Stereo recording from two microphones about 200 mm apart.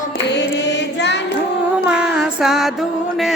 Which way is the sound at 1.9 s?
5° right (ahead or behind).